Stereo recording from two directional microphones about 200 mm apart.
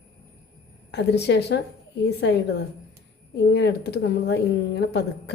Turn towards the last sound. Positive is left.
turn(degrees=55)  # may be behind; listen again after turning